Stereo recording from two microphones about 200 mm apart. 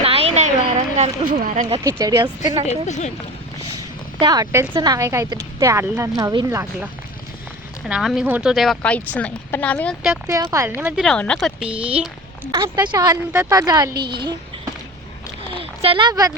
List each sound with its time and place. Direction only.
0.0 s a sound: 30° right (ahead or behind)
1.8 s speech: 15° right (ahead or behind)
2.6 s speech: 35° left (ahead or behind)
4.2 s a woman's voice: 20° right (ahead or behind)
7.9 s speech: centre (ahead or behind)
10.2 s a woman's voice: 15° right (ahead or behind)
10.9 s speech: 5° left (ahead or behind)
12.5 s speech: 20° right (ahead or behind)